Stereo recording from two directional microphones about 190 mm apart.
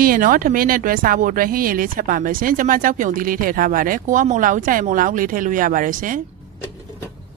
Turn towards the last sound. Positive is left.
turn(degrees=-45)  # may be behind; listen again after turning